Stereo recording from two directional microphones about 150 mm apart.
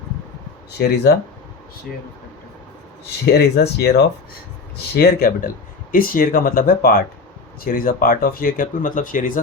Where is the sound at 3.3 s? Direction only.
90° left.